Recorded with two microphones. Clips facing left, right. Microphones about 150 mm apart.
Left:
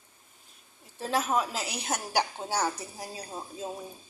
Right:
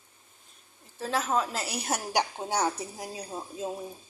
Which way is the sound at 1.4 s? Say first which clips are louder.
Right 1 dB; centre (ahead or behind).